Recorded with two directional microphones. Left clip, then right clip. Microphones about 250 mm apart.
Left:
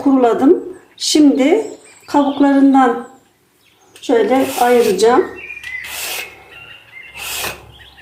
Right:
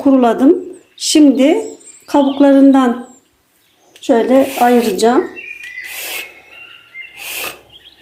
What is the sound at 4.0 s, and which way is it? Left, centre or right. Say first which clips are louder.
Speech: right 1 dB; right.